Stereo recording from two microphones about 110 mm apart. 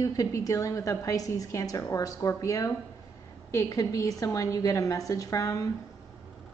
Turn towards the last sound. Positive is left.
turn(degrees=30)  # may be behind; listen again after turning